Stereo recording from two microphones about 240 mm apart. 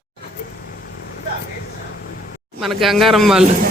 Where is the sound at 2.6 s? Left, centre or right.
Centre.